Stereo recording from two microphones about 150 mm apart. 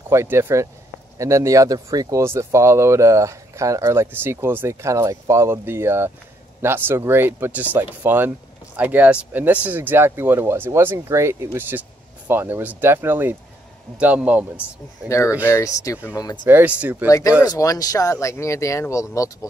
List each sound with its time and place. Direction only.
0.1 s speech: 15° right (ahead or behind)
15.0 s speech: 20° left (ahead or behind)
16.4 s speech: 10° right (ahead or behind)
17.5 s speech: 25° left (ahead or behind)